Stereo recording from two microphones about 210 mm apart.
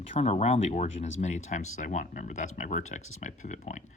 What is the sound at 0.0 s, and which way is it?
Speech, 30° left (ahead or behind).